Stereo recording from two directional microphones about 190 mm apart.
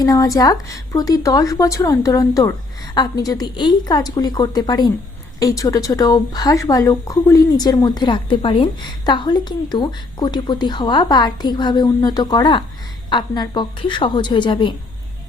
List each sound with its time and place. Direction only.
0.0 s speech: 20° left (ahead or behind)